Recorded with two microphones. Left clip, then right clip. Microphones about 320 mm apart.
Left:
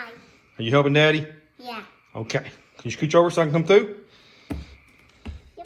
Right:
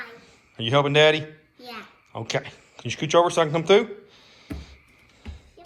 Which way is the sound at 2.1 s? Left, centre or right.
Right.